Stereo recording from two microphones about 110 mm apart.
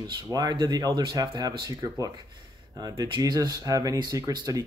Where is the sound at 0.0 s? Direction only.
40° right (ahead or behind).